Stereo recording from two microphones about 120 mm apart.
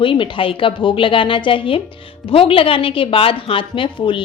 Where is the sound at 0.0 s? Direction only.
45° left (ahead or behind).